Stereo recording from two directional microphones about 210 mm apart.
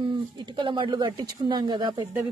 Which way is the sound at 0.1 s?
20° right (ahead or behind).